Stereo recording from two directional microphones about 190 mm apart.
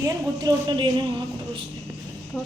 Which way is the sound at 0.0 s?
20° right (ahead or behind).